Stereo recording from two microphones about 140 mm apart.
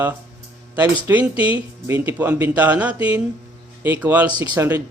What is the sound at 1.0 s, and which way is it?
A man's voice, 10° right (ahead or behind).